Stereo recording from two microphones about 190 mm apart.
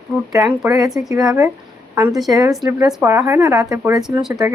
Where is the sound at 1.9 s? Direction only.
15° right (ahead or behind).